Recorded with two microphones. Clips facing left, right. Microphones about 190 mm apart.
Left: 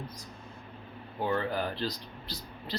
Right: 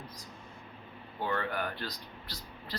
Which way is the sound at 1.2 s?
30° left (ahead or behind).